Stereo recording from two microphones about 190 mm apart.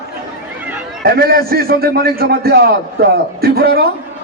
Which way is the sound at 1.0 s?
55° right (ahead or behind).